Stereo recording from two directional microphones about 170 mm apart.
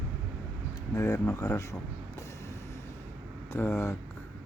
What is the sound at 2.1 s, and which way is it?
Vehicle, 15° left (ahead or behind).